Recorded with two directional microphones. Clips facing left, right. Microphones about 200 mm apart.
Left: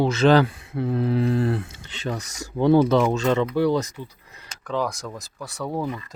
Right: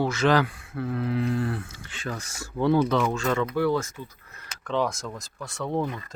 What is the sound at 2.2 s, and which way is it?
Speech, 40° left (ahead or behind).